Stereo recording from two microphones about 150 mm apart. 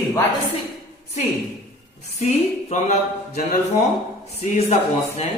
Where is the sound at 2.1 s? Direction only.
50° left (ahead or behind).